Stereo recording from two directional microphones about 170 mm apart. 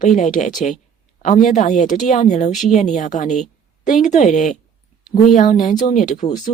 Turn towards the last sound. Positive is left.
turn(degrees=50)  # may be behind; listen again after turning